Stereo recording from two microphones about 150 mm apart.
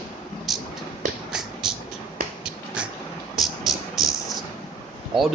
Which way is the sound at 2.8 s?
5° right (ahead or behind).